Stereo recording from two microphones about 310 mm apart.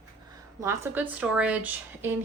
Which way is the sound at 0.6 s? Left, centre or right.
Centre.